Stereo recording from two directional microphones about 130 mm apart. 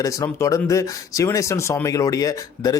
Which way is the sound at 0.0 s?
25° left (ahead or behind).